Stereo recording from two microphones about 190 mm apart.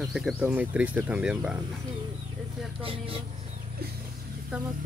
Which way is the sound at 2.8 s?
30° right (ahead or behind).